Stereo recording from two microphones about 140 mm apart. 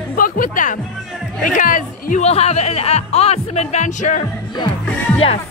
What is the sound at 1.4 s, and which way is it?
Speech, 75° left (ahead or behind).